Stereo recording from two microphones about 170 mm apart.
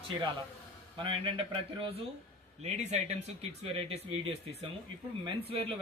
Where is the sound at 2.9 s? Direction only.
40° right (ahead or behind).